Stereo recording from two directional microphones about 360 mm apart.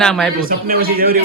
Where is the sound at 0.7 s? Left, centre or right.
Right.